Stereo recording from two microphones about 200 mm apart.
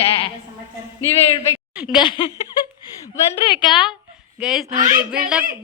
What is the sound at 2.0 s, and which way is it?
Speech, 25° left (ahead or behind).